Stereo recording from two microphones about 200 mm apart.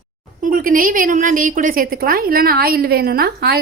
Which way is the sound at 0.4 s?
45° right (ahead or behind).